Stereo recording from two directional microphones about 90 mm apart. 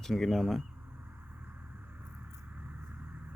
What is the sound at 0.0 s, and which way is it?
Speech, 5° left (ahead or behind).